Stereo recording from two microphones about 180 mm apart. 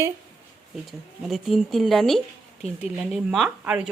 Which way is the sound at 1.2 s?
Centre (ahead or behind).